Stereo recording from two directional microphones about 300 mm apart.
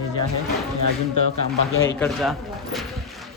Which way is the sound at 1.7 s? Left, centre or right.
Left.